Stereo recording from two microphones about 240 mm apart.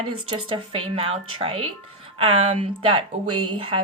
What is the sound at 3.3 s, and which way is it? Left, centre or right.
Speech, right.